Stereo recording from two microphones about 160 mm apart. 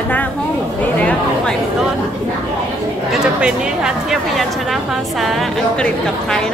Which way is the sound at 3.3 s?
5° right (ahead or behind).